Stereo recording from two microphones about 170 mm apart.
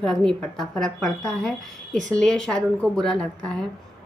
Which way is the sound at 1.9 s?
50° right (ahead or behind).